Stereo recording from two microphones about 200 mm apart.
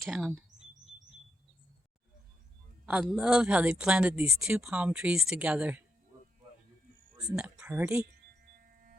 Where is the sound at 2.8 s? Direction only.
5° right (ahead or behind).